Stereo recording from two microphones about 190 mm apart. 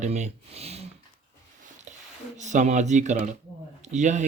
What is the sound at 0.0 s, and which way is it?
Speech, 35° right (ahead or behind).